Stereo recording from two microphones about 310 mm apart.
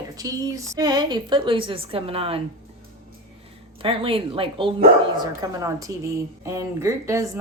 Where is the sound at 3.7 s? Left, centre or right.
Centre.